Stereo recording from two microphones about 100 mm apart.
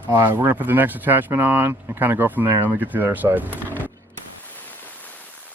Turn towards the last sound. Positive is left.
turn(degrees=-20)  # may be behind; listen again after turning